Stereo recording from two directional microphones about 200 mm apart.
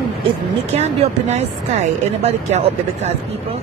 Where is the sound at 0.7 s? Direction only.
30° right (ahead or behind).